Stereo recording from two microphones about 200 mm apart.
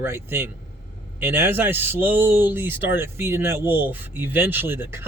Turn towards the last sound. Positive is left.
turn(degrees=-10)  # may be behind; listen again after turning